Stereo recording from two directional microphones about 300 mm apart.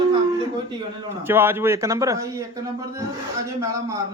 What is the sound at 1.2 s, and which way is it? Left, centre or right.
A man's voice, centre.